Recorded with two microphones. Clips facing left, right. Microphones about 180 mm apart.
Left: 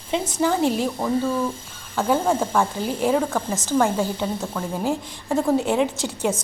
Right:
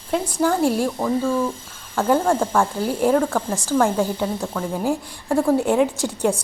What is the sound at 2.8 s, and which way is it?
Speech, 10° right (ahead or behind).